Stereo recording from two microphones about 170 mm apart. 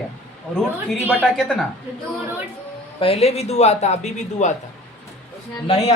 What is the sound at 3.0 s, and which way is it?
A woman's voice, 35° left (ahead or behind).